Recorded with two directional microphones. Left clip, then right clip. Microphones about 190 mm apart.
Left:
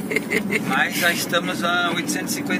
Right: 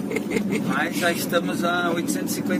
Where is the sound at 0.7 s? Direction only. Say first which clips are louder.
Left 4 dB; 45° right (ahead or behind).